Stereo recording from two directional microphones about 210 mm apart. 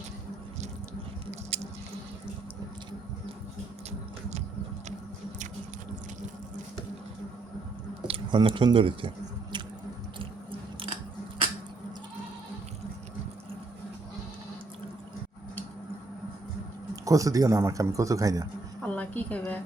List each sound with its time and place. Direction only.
1.3 s squish: 30° right (ahead or behind)
8.0 s squish: 25° right (ahead or behind)
10.2 s biting: 25° right (ahead or behind)
16.9 s a man's voice: 15° right (ahead or behind)
18.9 s a sound: 5° left (ahead or behind)